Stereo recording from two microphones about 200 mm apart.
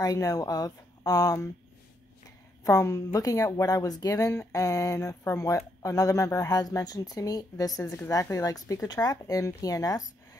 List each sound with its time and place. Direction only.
0.0 s speech: 15° left (ahead or behind)
2.6 s speech: 15° left (ahead or behind)